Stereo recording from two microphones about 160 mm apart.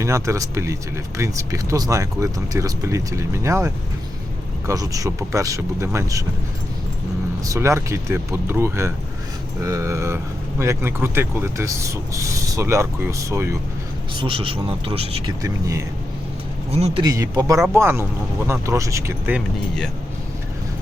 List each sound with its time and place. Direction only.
0.0 s speech: 20° right (ahead or behind)
7.4 s speech: 20° right (ahead or behind)
14.2 s speech: 35° right (ahead or behind)
15.4 s speech: 20° right (ahead or behind)
16.7 s speech: 40° right (ahead or behind)
17.0 s speech: 25° right (ahead or behind)